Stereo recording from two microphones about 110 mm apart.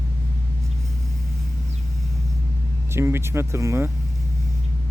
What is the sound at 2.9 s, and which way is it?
Speech, 20° right (ahead or behind).